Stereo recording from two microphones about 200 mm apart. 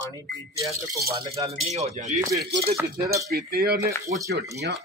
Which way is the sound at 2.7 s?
15° right (ahead or behind).